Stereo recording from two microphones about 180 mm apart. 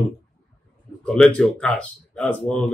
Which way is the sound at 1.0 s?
5° left (ahead or behind).